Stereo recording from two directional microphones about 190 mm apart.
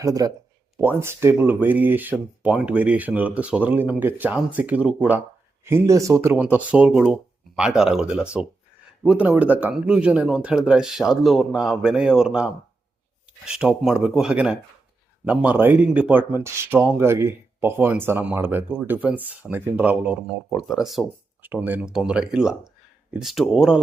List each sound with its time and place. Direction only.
0.0 s speech: 20° right (ahead or behind)